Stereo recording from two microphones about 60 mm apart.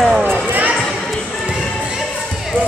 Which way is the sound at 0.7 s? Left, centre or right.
Centre.